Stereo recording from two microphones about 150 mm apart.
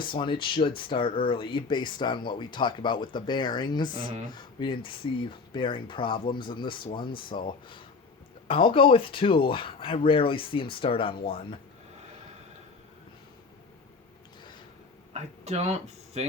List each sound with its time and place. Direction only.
0.2 s speech: 35° left (ahead or behind)
8.4 s speech: 35° left (ahead or behind)
15.1 s speech: 45° right (ahead or behind)